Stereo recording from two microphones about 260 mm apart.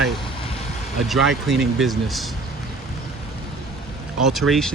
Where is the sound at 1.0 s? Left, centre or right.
Centre.